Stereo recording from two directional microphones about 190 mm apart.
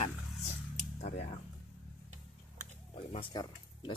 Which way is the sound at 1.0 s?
35° left (ahead or behind).